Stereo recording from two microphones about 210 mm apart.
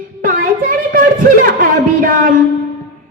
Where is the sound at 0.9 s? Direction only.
40° right (ahead or behind).